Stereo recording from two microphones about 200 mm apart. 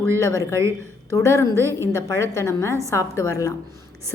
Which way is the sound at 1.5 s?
15° right (ahead or behind).